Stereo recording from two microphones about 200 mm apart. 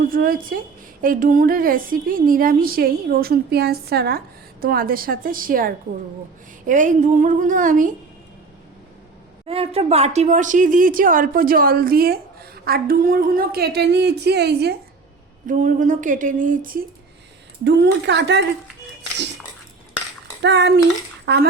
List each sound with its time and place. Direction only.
0.0 s speech: 45° right (ahead or behind)
6.7 s a sound: 40° right (ahead or behind)
9.5 s speech: 30° right (ahead or behind); by 14.8 s 55° right (ahead or behind)
15.4 s a sound: 40° right (ahead or behind)
17.6 s speech: 60° right (ahead or behind)
20.4 s speech: 60° right (ahead or behind)